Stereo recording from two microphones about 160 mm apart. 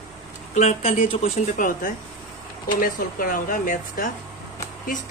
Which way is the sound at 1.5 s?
55° left (ahead or behind).